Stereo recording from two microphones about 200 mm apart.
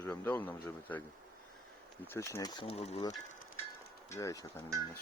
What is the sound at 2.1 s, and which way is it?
Speech, 15° left (ahead or behind).